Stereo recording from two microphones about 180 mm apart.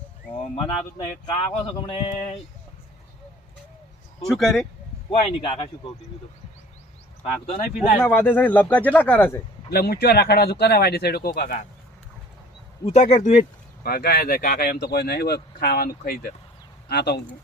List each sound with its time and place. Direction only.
0.6 s speech: 30° left (ahead or behind)
4.3 s speech: centre (ahead or behind)
5.2 s a man's voice: 30° left (ahead or behind)
7.9 s speech: 10° left (ahead or behind)
9.6 s speech: 60° left (ahead or behind)
12.8 s speech: 40° left (ahead or behind)
13.8 s speech: 55° left (ahead or behind)